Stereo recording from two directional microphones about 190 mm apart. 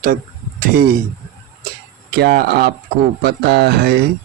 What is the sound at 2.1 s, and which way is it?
Speech, 55° right (ahead or behind).